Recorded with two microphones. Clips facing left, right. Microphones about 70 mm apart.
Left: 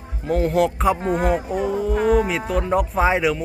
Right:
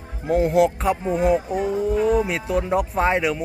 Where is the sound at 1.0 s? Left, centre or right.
Left.